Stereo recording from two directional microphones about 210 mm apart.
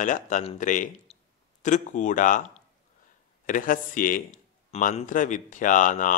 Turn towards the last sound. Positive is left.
turn(degrees=40)  # may be behind; listen again after turning